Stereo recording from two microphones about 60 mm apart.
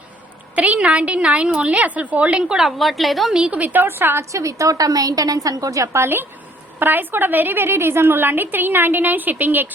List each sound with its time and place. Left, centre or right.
0.5 s a woman's voice: right
2.6 s a woman's voice: centre
3.3 s a woman's voice: right
4.3 s a woman's voice: right
6.0 s a woman's voice: right